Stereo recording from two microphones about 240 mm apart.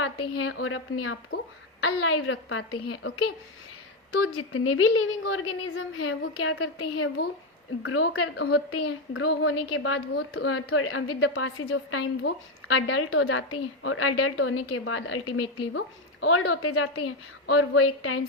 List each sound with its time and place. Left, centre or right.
0.6 s a woman's voice: left
16.2 s a woman's voice: left